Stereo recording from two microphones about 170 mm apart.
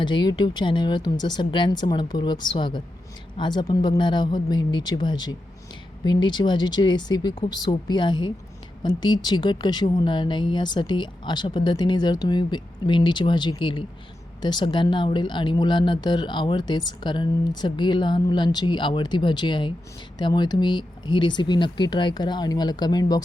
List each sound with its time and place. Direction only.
0.0 s speech: 25° left (ahead or behind)